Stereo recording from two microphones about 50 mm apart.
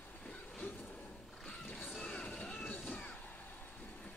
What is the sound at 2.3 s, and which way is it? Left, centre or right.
Train, centre.